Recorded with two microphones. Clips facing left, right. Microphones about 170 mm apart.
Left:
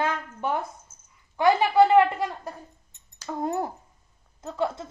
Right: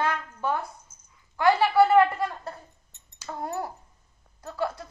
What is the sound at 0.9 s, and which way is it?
Dog, 15° right (ahead or behind).